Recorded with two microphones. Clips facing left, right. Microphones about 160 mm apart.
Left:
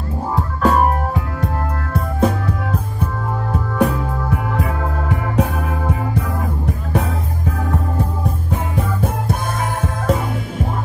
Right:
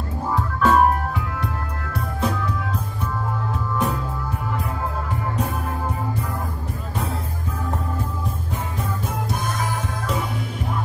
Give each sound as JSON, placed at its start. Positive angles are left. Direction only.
{"t": 0.6, "sound": "music", "side_deg": 40}
{"t": 2.1, "sound": "music", "side_deg": 50}
{"t": 3.7, "sound": "music", "side_deg": 70}
{"t": 8.5, "sound": "music", "side_deg": 55}